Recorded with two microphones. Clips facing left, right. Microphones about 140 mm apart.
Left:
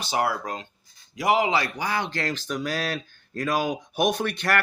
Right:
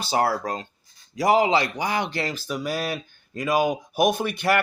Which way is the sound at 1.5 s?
20° right (ahead or behind).